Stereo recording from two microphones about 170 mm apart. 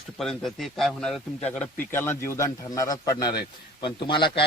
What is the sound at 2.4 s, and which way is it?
A man's voice, 20° left (ahead or behind).